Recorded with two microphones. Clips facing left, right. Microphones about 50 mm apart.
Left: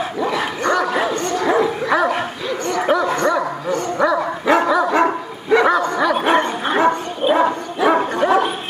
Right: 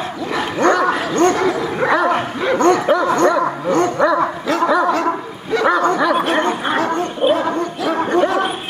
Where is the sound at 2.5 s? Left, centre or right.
Right.